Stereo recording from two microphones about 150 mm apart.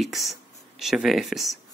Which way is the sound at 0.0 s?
Centre (ahead or behind).